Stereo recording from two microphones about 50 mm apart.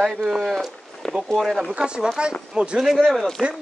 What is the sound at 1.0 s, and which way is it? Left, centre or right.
Speech, centre.